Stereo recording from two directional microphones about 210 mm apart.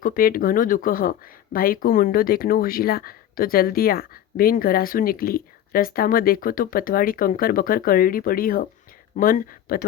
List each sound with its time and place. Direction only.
0.0 s speech: 45° left (ahead or behind)